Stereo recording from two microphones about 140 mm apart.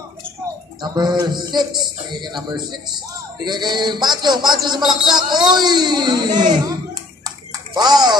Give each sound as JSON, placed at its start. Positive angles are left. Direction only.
{"t": 0.8, "sound": "speech", "side_deg": -30}
{"t": 7.7, "sound": "speech", "side_deg": -30}